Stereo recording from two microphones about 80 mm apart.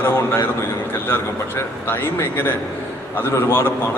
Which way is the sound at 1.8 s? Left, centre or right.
Left.